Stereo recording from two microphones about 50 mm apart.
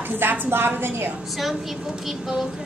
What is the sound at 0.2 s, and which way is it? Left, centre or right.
Speech, right.